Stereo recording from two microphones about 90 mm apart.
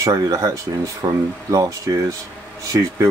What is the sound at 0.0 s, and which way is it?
Speech, 40° right (ahead or behind).